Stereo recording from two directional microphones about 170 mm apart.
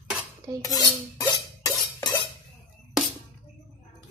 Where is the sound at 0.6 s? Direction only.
20° left (ahead or behind).